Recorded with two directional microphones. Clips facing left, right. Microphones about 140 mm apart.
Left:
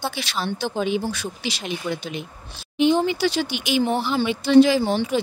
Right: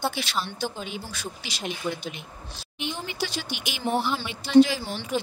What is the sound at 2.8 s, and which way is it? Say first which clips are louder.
A woman's voice: left 13 dB; 90° left.